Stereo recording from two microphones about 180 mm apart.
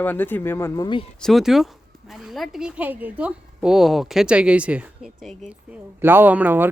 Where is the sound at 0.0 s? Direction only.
10° left (ahead or behind).